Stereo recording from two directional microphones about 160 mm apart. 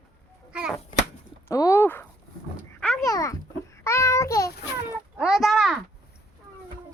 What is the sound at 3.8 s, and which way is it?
Child singing, 20° left (ahead or behind).